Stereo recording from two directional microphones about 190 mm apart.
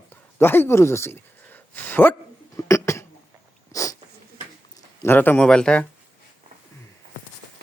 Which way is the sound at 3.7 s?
15° left (ahead or behind).